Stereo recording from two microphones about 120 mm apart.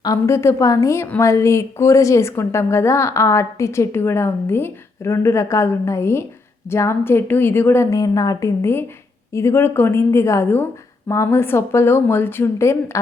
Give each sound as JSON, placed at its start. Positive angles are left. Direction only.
{"t": 0.0, "sound": "a woman's voice", "side_deg": 25}